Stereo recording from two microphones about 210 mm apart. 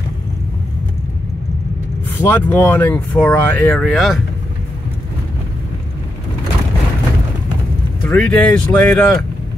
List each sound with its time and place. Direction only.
2.1 s speech: 10° left (ahead or behind)
8.0 s speech: 5° left (ahead or behind)